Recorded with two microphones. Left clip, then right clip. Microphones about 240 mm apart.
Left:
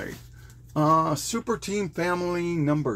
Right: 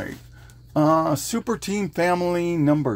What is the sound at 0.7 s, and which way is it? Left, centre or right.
Speech, right.